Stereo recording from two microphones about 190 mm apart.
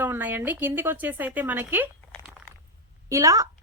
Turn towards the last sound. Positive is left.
turn(degrees=-20)  # may be behind; listen again after turning